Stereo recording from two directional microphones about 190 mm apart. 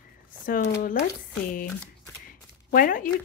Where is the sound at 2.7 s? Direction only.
45° left (ahead or behind).